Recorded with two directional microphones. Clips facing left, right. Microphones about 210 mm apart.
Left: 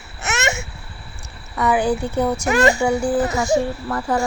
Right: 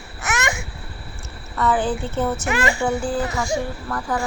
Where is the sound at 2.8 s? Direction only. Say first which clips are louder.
Left 4 dB; 15° left (ahead or behind).